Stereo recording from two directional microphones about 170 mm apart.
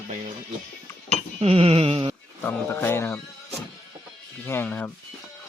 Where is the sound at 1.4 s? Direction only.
35° right (ahead or behind).